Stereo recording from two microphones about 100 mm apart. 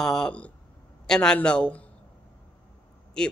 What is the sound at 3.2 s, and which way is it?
Speech, 5° left (ahead or behind).